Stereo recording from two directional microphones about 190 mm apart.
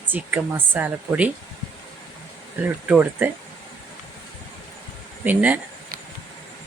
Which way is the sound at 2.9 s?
10° right (ahead or behind).